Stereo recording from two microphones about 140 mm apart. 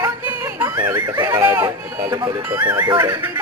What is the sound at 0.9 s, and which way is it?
Speech, 25° right (ahead or behind).